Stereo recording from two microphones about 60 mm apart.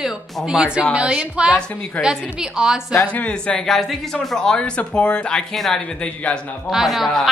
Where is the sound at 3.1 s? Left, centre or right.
Centre.